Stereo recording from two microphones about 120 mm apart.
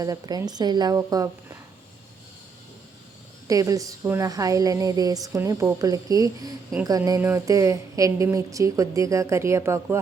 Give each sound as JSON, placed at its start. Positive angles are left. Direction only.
{"t": 0.0, "sound": "a woman's voice", "side_deg": -30}
{"t": 3.4, "sound": "a woman's voice", "side_deg": -30}